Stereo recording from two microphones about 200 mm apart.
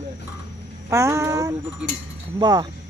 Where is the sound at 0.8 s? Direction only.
15° right (ahead or behind).